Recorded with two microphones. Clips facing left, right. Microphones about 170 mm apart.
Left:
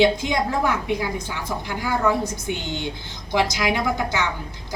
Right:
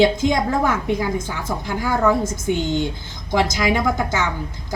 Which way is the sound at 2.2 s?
45° right (ahead or behind).